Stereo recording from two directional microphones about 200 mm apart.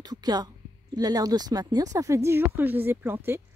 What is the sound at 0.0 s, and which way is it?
A woman's voice, 20° right (ahead or behind).